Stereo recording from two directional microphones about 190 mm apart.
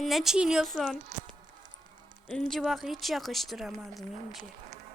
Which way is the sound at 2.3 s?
Centre (ahead or behind).